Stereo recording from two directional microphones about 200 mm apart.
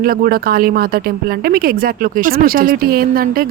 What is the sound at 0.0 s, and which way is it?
A woman's voice, 45° right (ahead or behind).